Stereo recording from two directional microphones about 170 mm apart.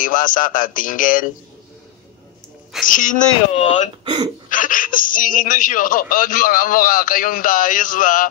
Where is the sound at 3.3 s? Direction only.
40° left (ahead or behind).